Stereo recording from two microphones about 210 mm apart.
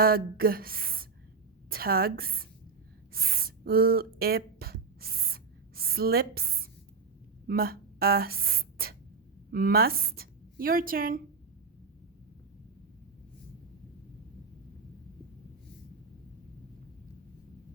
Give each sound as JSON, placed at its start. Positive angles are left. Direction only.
{"t": 0.0, "sound": "a woman's voice", "side_deg": -45}
{"t": 3.1, "sound": "a sound", "side_deg": -45}
{"t": 7.4, "sound": "a woman's voice", "side_deg": -45}